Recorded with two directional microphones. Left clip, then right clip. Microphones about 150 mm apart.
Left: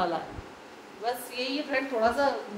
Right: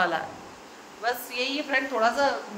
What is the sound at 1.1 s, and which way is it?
A woman's voice, 10° left (ahead or behind).